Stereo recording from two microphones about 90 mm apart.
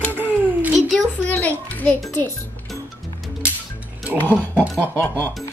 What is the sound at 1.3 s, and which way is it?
Speech, 20° left (ahead or behind).